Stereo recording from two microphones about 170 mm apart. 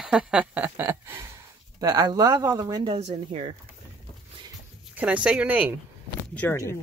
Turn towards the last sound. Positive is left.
turn(degrees=15)  # may be behind; listen again after turning